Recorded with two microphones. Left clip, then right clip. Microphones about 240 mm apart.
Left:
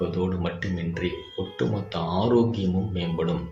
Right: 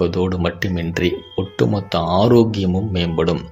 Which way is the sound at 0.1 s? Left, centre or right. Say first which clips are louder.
Right 8 dB; right.